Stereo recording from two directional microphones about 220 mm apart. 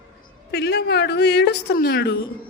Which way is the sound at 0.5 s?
50° left (ahead or behind).